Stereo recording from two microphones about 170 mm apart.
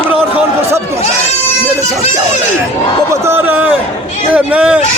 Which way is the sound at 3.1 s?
15° right (ahead or behind).